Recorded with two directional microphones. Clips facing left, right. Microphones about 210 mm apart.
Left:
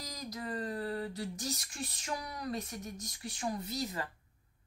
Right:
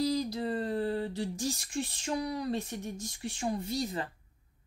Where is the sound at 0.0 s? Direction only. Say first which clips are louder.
Right 12 dB; 30° right (ahead or behind).